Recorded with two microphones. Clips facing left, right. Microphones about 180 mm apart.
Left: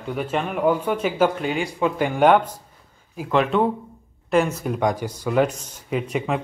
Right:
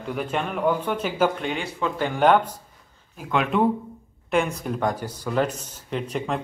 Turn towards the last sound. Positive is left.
turn(degrees=10)  # may be behind; listen again after turning